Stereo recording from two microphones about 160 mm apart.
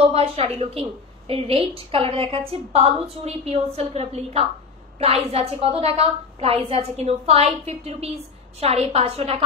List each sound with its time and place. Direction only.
0.0 s a woman's voice: 40° right (ahead or behind)